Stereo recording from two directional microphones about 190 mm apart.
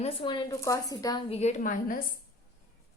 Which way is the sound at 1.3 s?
35° left (ahead or behind).